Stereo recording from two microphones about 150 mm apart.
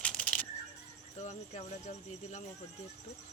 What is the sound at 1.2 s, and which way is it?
Speech, 50° left (ahead or behind).